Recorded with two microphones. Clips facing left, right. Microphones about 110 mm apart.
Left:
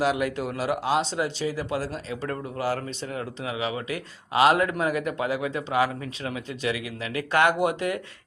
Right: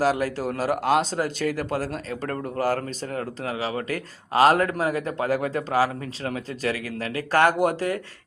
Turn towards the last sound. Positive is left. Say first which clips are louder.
# right 2 dB
turn(degrees=-35)  # may be behind; listen again after turning